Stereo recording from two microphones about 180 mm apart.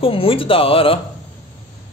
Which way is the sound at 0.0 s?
30° left (ahead or behind).